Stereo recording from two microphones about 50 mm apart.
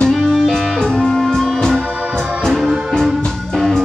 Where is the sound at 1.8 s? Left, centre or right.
Right.